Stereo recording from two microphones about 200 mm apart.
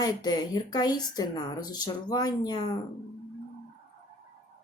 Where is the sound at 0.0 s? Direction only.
20° left (ahead or behind).